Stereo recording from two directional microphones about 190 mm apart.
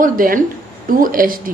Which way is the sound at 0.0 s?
45° right (ahead or behind).